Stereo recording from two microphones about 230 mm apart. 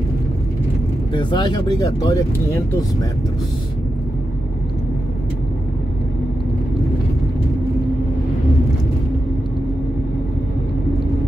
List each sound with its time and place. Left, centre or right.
1.1 s speech: centre